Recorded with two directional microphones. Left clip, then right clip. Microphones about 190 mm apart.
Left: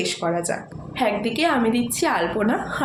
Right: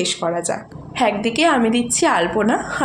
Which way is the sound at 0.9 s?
35° right (ahead or behind).